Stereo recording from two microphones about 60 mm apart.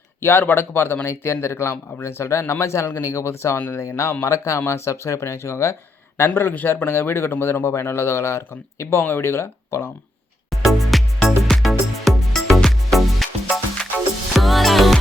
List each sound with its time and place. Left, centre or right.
0.2 s speech: left
10.5 s music: centre